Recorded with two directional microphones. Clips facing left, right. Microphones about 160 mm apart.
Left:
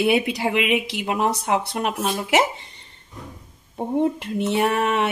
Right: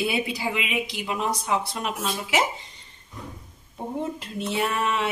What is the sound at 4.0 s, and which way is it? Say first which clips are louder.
A woman's voice: left 9 dB; 65° left (ahead or behind).